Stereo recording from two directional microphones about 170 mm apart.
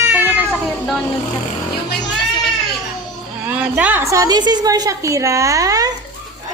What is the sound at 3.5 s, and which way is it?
A woman's voice, 10° right (ahead or behind).